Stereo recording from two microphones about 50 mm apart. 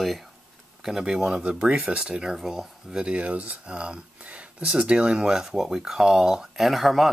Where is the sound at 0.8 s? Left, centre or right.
Centre.